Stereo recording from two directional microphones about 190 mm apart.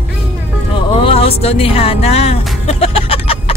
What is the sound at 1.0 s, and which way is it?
Music, 30° left (ahead or behind).